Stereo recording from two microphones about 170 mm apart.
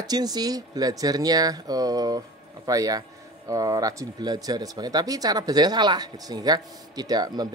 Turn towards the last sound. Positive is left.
turn(degrees=-25)  # may be behind; listen again after turning